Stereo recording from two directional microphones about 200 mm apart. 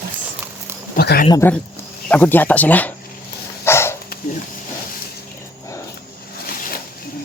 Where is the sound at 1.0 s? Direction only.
50° left (ahead or behind).